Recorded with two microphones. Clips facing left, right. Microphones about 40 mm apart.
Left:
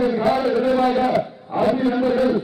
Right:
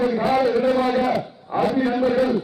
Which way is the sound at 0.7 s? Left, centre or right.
Left.